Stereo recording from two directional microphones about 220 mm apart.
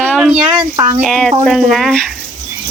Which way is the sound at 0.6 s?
20° right (ahead or behind).